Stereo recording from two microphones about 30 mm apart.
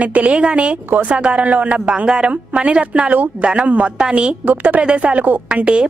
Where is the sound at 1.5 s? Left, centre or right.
Right.